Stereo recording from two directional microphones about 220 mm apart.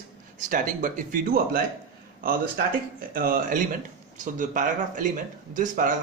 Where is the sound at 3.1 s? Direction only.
40° right (ahead or behind).